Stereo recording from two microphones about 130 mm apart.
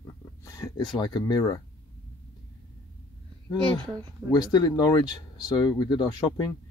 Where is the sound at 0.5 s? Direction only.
30° left (ahead or behind).